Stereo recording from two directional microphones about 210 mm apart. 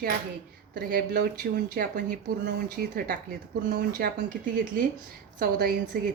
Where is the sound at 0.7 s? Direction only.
45° right (ahead or behind).